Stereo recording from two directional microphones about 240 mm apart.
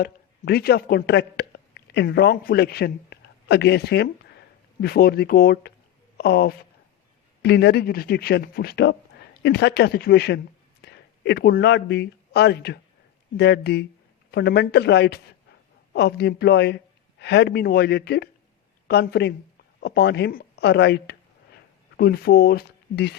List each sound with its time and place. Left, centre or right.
0.0 s a woman's voice: left